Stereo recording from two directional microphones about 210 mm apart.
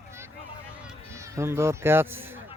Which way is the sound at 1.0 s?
15° right (ahead or behind).